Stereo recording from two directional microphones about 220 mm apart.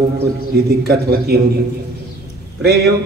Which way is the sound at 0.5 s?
45° right (ahead or behind).